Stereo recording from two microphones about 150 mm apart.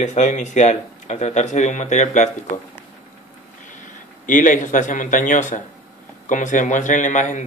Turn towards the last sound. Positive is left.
turn(degrees=55)  # may be behind; listen again after turning